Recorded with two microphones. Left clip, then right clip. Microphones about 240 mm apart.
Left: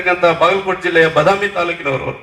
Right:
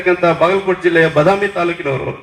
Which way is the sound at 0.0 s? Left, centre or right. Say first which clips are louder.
Even; left.